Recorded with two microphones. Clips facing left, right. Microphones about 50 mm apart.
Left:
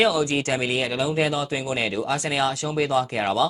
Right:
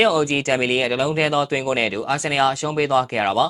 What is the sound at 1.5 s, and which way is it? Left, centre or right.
Speech, right.